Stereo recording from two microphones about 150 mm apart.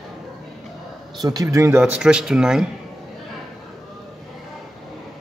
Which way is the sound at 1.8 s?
5° right (ahead or behind).